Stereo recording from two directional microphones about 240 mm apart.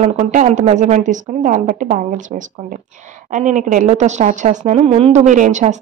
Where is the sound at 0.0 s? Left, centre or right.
Right.